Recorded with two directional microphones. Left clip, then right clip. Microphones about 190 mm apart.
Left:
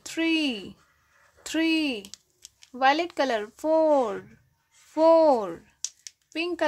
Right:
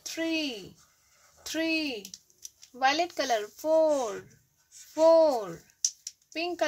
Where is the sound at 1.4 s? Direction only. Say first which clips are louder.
Left 4 dB; 40° left (ahead or behind).